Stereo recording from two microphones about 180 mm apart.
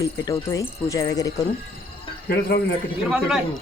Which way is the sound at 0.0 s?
20° left (ahead or behind).